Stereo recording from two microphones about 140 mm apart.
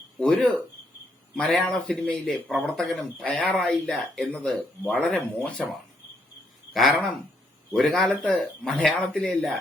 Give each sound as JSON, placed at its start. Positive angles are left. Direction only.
{"t": 0.2, "sound": "a man's voice", "side_deg": 5}
{"t": 7.7, "sound": "speech", "side_deg": 0}